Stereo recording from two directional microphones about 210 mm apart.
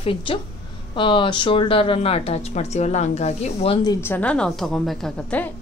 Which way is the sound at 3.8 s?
10° left (ahead or behind).